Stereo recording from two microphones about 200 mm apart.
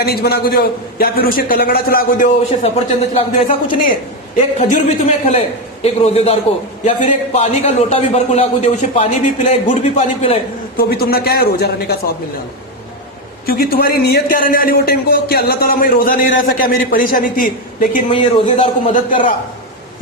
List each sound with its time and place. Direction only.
0.0 s a man's voice: 50° left (ahead or behind); by 3.5 s 30° left (ahead or behind)
4.5 s a man's voice: 35° left (ahead or behind)
10.8 s a man's voice: 50° left (ahead or behind)
13.4 s a man's voice: 50° left (ahead or behind)
18.1 s speech: 25° left (ahead or behind)